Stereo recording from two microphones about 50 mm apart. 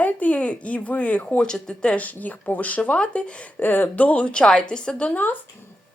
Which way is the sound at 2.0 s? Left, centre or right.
Left.